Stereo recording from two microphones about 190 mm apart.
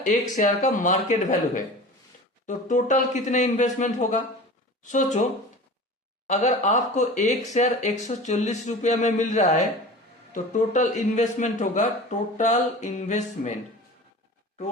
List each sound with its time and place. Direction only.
0.0 s speech: 40° left (ahead or behind)
6.2 s speech: 40° left (ahead or behind)